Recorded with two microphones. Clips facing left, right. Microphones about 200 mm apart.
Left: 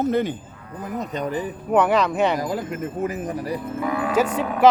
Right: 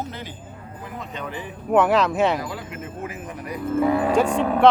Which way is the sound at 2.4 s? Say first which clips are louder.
Left 6 dB; 45° left (ahead or behind).